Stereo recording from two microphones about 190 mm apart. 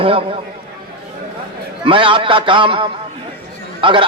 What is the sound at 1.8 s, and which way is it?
A man's voice, 25° right (ahead or behind).